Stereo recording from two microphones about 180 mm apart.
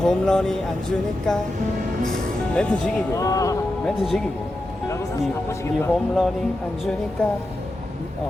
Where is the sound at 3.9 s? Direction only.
Centre (ahead or behind).